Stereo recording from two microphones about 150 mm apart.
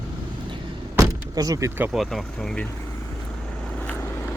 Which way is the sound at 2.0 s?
Centre (ahead or behind).